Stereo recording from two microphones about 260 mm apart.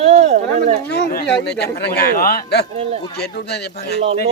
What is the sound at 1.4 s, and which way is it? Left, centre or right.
Speech, left.